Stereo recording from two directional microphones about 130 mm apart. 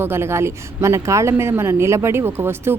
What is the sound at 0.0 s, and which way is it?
A woman's voice, 20° right (ahead or behind).